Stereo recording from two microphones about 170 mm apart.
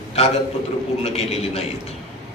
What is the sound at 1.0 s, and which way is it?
Speech, 40° left (ahead or behind).